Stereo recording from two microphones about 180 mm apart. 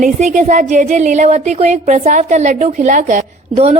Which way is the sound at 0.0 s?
40° right (ahead or behind).